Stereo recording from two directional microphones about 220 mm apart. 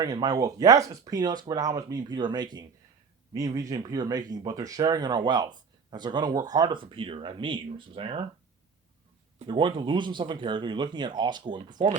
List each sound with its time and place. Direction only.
0.0 s speech: 20° right (ahead or behind)
9.4 s speech: 20° right (ahead or behind)